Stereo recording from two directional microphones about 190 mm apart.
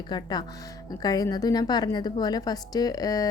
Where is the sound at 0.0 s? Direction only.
20° left (ahead or behind).